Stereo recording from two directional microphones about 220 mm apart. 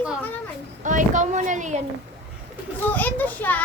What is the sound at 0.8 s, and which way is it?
Speech, 35° right (ahead or behind).